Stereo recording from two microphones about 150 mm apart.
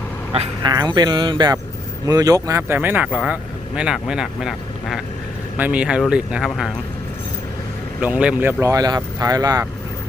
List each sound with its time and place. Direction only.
0.6 s speech: 25° right (ahead or behind); by 6.7 s 5° right (ahead or behind)
8.0 s speech: 10° right (ahead or behind); by 9.6 s 25° right (ahead or behind)